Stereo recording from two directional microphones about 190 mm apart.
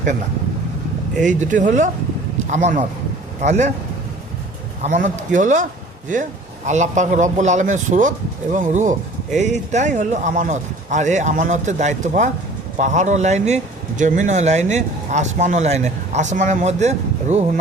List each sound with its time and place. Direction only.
1.2 s speech: 40° right (ahead or behind)
4.8 s speech: 40° right (ahead or behind)
6.7 s speech: 40° right (ahead or behind)